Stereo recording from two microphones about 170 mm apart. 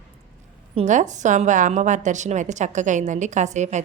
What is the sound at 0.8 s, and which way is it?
A woman's voice, 45° right (ahead or behind).